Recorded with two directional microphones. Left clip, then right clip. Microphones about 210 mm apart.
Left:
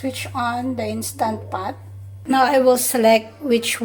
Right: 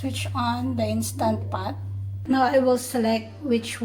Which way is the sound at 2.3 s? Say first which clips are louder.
Left 5 dB; 45° left (ahead or behind).